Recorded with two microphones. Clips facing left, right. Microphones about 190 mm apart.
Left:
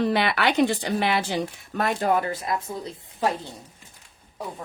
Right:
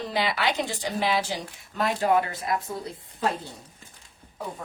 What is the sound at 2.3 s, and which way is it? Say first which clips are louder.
Speech: left 1 dB; 25° left (ahead or behind).